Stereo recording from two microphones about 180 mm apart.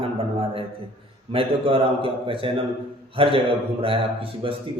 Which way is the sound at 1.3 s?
30° right (ahead or behind).